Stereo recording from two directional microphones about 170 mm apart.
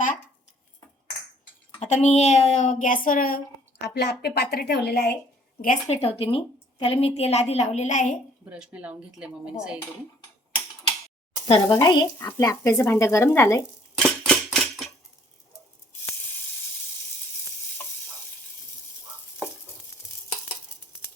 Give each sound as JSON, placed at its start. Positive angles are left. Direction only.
{"t": 1.8, "sound": "speech", "side_deg": 40}
{"t": 5.9, "sound": "a woman's voice", "side_deg": 35}
{"t": 8.4, "sound": "speech", "side_deg": -5}
{"t": 11.4, "sound": "a woman's voice", "side_deg": 35}
{"t": 14.0, "sound": "a sound", "side_deg": 0}